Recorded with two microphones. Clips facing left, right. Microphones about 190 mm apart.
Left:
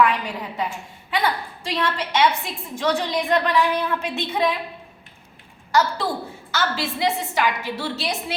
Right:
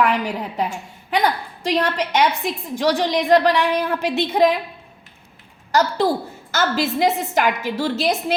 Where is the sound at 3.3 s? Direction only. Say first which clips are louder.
Right 4 dB; 35° right (ahead or behind).